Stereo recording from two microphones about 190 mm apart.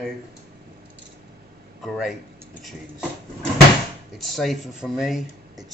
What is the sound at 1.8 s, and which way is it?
Speech, centre (ahead or behind).